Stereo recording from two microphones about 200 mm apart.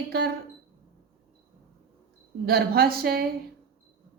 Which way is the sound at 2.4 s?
50° right (ahead or behind).